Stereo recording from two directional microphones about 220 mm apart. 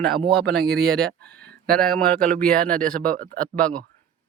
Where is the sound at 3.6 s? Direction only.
5° left (ahead or behind).